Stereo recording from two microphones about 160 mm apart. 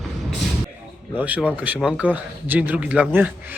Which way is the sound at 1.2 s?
10° right (ahead or behind).